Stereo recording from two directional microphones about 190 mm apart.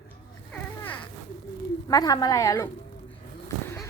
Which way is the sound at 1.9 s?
20° left (ahead or behind).